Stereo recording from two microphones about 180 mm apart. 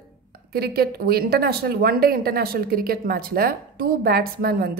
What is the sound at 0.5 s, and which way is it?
Speech, 60° right (ahead or behind).